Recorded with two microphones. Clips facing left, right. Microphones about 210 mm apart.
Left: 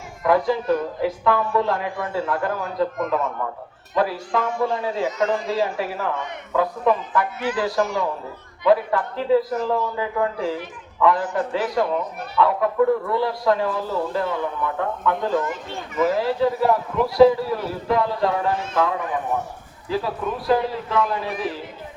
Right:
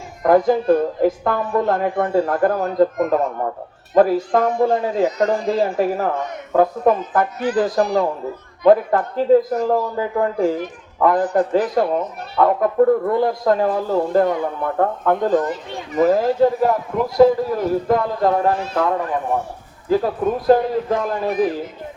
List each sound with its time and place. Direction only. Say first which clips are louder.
0.2 s a man's voice: right 5 dB; 45° right (ahead or behind)
8.6 s a man's voice: right 5 dB; 45° right (ahead or behind)